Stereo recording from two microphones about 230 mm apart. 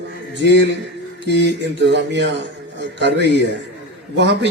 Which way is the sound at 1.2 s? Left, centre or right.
Right.